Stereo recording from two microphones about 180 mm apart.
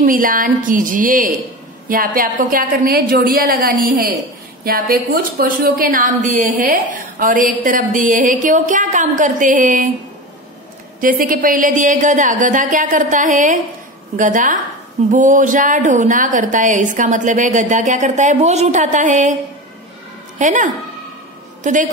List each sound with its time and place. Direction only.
0.0 s a woman's voice: 50° right (ahead or behind)
11.0 s a woman's voice: 50° right (ahead or behind)
20.3 s a woman's voice: 45° right (ahead or behind)